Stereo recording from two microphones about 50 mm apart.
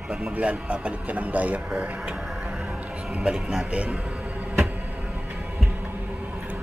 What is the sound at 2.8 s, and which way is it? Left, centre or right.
Speech, right.